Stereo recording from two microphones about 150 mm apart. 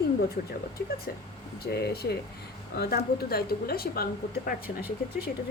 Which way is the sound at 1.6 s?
90° left.